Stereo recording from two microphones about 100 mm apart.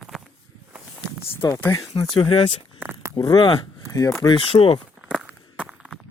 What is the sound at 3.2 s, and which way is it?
Speech, 40° left (ahead or behind).